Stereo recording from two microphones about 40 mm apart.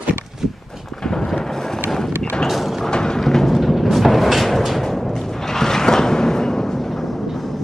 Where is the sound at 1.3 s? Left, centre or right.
Centre.